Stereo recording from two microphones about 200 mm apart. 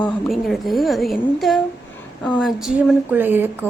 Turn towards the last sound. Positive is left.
turn(degrees=-10)  # may be behind; listen again after turning